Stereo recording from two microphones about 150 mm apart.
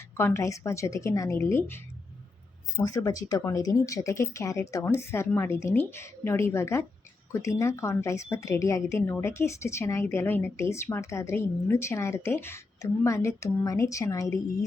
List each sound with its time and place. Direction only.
0.2 s speech: 15° left (ahead or behind)